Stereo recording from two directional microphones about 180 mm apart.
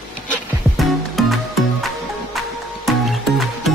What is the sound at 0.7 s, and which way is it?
Music, centre (ahead or behind).